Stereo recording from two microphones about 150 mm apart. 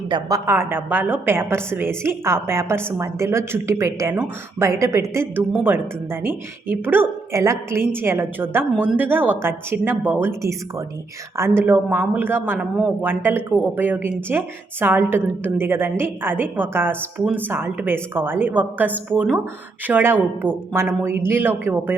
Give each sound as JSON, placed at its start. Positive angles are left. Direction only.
{"t": 0.1, "sound": "speech", "side_deg": -25}